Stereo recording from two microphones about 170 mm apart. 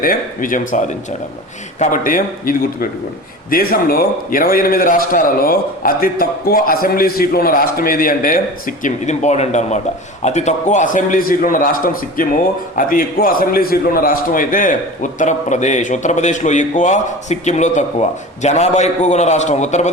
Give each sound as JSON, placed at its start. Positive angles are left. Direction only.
{"t": 0.0, "sound": "a man's voice", "side_deg": 55}